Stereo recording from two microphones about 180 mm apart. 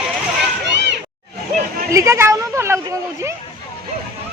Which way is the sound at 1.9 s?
15° right (ahead or behind).